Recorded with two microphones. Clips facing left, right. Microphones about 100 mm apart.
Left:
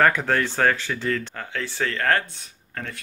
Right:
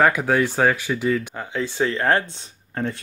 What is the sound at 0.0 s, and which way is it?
Speech, 10° right (ahead or behind).